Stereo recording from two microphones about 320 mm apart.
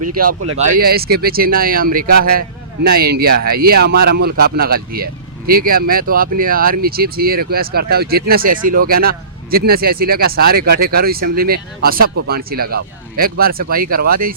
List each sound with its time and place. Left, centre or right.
0.2 s a man's voice: right